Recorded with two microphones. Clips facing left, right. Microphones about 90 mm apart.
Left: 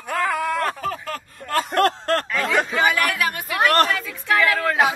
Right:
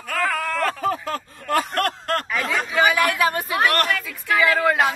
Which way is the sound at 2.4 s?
65° left (ahead or behind).